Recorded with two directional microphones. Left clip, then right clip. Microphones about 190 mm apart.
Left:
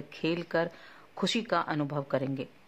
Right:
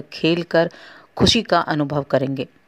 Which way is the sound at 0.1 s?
35° right (ahead or behind).